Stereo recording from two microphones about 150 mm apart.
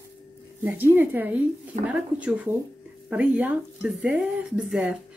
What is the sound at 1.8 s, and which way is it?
A woman's voice, 10° right (ahead or behind).